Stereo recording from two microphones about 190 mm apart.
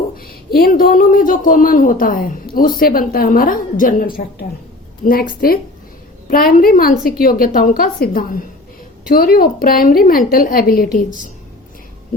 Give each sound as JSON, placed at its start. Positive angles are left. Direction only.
{"t": 0.2, "sound": "speech", "side_deg": 50}